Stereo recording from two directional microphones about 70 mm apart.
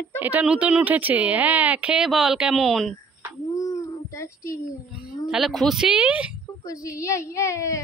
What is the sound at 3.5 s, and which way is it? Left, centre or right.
Child singing, left.